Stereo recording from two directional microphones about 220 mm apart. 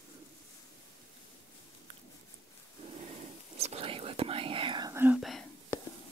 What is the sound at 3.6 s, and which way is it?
Whispering, 25° right (ahead or behind).